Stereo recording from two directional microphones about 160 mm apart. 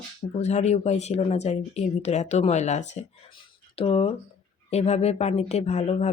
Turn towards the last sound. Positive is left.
turn(degrees=45)  # may be behind; listen again after turning